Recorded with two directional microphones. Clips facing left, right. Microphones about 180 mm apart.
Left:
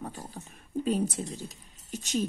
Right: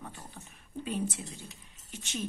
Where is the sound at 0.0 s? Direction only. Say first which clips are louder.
Left 7 dB; 40° left (ahead or behind).